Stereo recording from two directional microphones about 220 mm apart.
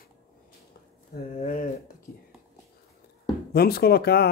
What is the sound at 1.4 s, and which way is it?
Speech, 35° left (ahead or behind).